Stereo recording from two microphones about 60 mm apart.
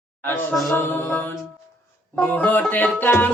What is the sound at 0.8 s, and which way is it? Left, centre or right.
Mantra, left.